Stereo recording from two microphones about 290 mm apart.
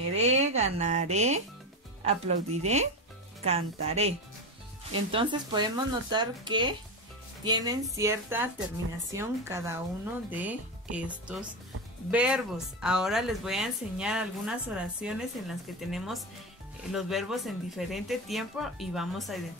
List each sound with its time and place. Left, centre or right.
0.1 s speech: right
5.1 s speech: centre